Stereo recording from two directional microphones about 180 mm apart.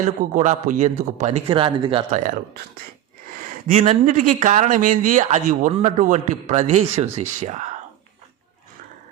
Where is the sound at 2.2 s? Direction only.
45° right (ahead or behind).